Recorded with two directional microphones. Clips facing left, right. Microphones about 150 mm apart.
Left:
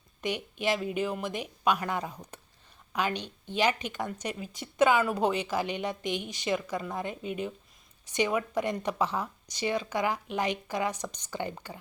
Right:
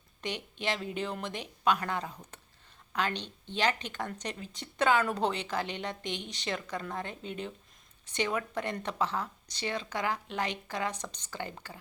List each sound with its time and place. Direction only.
0.2 s speech: 10° left (ahead or behind)